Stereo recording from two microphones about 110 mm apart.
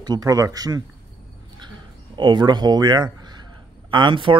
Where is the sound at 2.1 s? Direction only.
45° right (ahead or behind).